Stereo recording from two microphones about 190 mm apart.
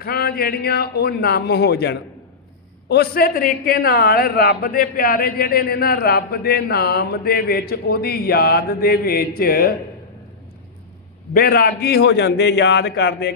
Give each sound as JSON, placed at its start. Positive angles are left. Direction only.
{"t": 0.0, "sound": "a man's voice", "side_deg": 55}
{"t": 11.3, "sound": "a man's voice", "side_deg": 50}